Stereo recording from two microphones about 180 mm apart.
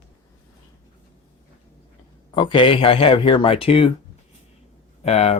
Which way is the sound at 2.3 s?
30° left (ahead or behind).